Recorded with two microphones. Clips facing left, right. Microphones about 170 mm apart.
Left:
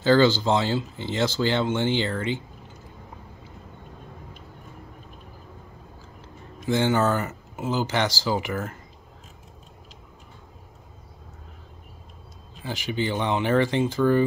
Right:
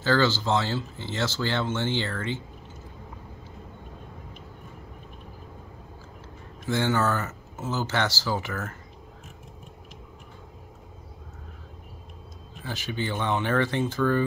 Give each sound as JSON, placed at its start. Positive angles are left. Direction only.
{"t": 0.0, "sound": "speech", "side_deg": 15}
{"t": 6.6, "sound": "speech", "side_deg": 20}
{"t": 12.6, "sound": "speech", "side_deg": 15}